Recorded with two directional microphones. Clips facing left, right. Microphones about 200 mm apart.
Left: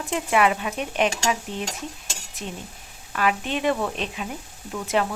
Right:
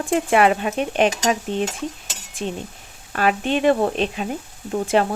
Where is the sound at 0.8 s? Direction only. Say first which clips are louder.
Right 3 dB; 30° right (ahead or behind).